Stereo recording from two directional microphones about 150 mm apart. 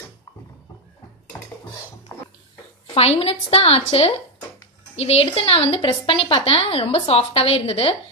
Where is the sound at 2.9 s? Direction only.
40° left (ahead or behind).